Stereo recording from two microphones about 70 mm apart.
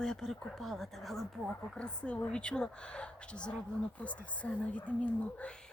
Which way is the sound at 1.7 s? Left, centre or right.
Centre.